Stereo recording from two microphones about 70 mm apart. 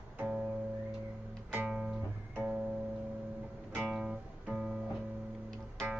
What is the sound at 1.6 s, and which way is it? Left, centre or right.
Music, centre.